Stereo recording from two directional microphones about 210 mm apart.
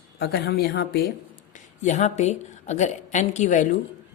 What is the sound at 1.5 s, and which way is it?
A woman's voice, 35° left (ahead or behind).